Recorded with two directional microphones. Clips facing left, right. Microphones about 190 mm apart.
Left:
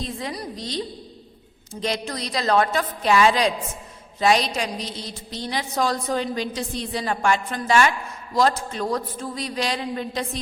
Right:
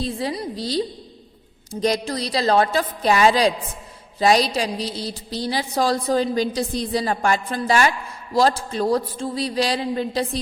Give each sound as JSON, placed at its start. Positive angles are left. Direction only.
{"t": 0.0, "sound": "a woman's voice", "side_deg": -30}